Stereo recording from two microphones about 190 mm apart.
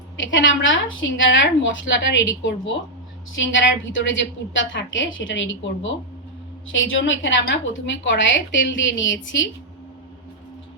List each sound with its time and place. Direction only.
0.2 s a woman's voice: 80° left